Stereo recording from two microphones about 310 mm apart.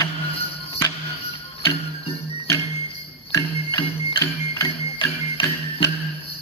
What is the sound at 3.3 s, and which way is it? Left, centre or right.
Music, centre.